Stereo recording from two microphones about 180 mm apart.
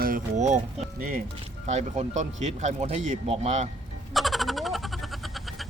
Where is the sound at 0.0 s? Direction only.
45° right (ahead or behind).